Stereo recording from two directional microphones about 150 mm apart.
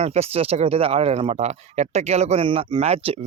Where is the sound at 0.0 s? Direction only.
45° right (ahead or behind).